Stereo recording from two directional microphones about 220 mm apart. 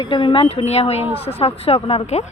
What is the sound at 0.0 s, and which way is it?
Speech, 20° left (ahead or behind).